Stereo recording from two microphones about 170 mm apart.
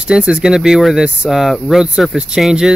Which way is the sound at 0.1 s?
5° right (ahead or behind).